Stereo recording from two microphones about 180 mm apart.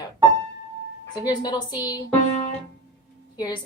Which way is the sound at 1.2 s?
20° left (ahead or behind).